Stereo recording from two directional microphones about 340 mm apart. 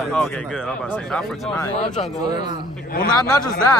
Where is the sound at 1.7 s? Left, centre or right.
Centre.